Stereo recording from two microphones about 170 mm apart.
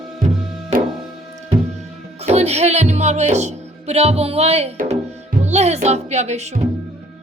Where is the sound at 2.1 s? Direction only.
40° right (ahead or behind).